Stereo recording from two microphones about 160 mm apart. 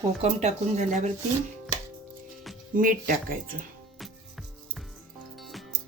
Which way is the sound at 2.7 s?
60° right (ahead or behind).